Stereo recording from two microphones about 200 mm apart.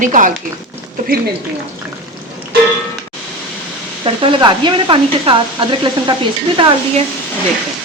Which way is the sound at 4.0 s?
25° right (ahead or behind).